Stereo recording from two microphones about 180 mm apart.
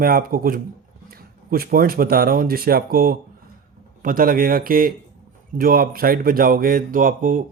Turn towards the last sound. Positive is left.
turn(degrees=-45)  # may be behind; listen again after turning